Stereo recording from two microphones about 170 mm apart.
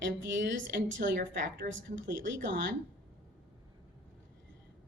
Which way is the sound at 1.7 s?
90° right.